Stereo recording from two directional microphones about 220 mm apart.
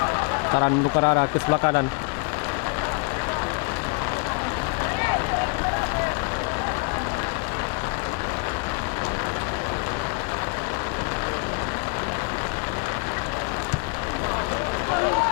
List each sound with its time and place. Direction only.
0.5 s speech: 25° left (ahead or behind)